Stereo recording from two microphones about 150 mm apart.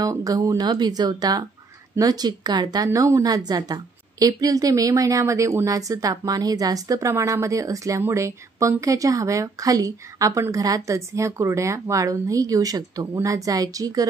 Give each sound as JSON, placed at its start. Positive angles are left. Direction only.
{"t": 0.0, "sound": "a woman's voice", "side_deg": -25}